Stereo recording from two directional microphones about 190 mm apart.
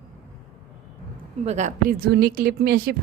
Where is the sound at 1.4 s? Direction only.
40° right (ahead or behind); by 3.0 s 55° right (ahead or behind).